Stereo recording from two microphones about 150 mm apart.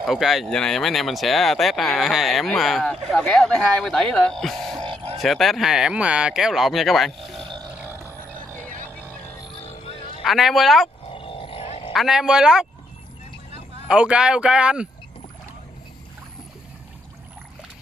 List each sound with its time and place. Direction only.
0.0 s speech: centre (ahead or behind)
9.8 s music: 35° left (ahead or behind)
10.2 s speech: centre (ahead or behind)
11.1 s roaring cats: 35° left (ahead or behind)
11.9 s speech: centre (ahead or behind)
13.8 s speech: 5° right (ahead or behind)